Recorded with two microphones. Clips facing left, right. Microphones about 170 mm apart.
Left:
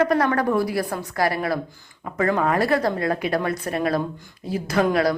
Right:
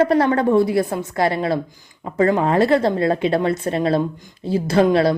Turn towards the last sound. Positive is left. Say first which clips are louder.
# right 5 dB
turn(degrees=-25)  # may be behind; listen again after turning